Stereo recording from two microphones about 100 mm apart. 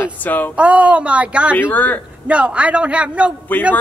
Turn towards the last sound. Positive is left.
turn(degrees=15)  # may be behind; listen again after turning